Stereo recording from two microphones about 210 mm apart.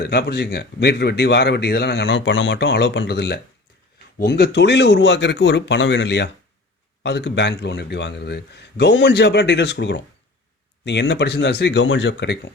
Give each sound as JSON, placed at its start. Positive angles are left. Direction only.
{"t": 0.0, "sound": "a man's voice", "side_deg": 50}